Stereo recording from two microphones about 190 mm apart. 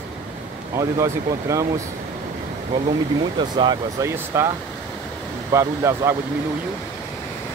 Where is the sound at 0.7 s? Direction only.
15° right (ahead or behind).